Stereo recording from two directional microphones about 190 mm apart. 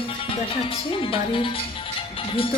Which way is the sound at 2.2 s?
30° left (ahead or behind).